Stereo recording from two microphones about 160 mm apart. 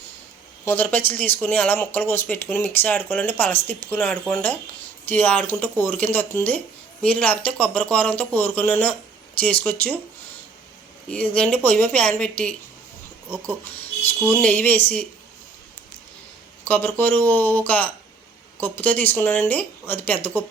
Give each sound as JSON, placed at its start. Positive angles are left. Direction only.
{"t": 0.6, "sound": "speech", "side_deg": 15}
{"t": 11.1, "sound": "speech", "side_deg": 10}
{"t": 13.7, "sound": "speech", "side_deg": 15}
{"t": 16.6, "sound": "speech", "side_deg": 10}